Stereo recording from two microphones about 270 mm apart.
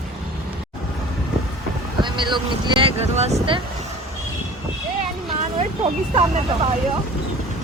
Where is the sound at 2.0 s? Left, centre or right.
Centre.